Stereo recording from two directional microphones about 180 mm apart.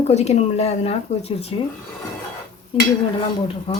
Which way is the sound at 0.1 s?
40° left (ahead or behind).